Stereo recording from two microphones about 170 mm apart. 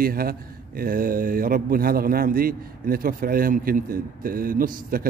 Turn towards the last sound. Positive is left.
turn(degrees=-55)  # may be behind; listen again after turning